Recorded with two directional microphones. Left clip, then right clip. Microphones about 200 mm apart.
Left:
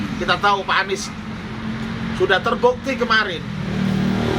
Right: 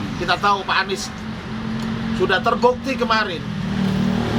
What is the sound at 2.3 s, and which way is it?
Speech, 25° right (ahead or behind).